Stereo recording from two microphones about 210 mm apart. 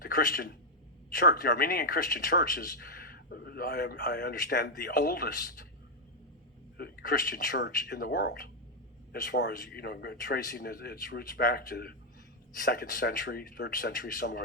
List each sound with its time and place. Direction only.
0.0 s speech: 45° left (ahead or behind)
6.7 s speech: 50° left (ahead or behind)